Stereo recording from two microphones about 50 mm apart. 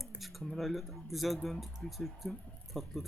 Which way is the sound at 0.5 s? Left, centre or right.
Centre.